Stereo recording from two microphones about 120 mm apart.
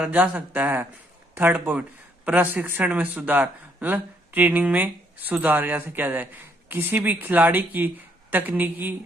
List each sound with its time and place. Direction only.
0.0 s speech: 10° right (ahead or behind)